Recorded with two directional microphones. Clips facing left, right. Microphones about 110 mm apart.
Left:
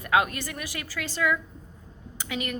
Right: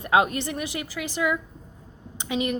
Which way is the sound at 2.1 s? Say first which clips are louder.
Right 6 dB; 20° right (ahead or behind).